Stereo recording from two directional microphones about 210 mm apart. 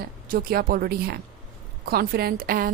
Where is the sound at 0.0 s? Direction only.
45° right (ahead or behind).